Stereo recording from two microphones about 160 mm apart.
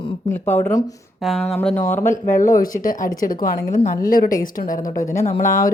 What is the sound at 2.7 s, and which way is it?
Speech, 55° left (ahead or behind).